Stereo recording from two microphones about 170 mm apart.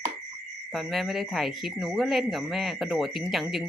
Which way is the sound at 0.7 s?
Centre (ahead or behind).